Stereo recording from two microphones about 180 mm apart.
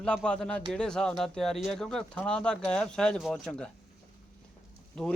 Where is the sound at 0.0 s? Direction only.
5° left (ahead or behind).